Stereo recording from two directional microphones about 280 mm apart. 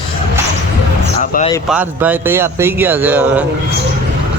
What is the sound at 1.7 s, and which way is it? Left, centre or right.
Speech, centre.